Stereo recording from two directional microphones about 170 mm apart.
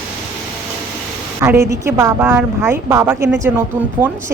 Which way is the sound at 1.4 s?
15° right (ahead or behind).